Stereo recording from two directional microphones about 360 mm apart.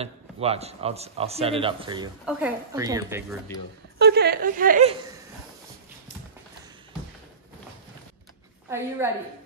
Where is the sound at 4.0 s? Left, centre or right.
Right.